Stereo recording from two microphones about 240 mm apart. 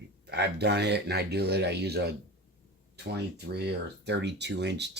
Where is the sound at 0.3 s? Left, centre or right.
Right.